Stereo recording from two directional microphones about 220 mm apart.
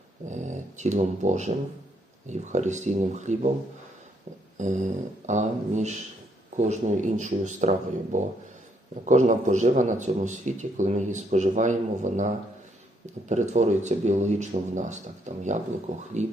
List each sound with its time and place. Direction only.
0.3 s a man's voice: 35° right (ahead or behind)
4.5 s a man's voice: 35° right (ahead or behind)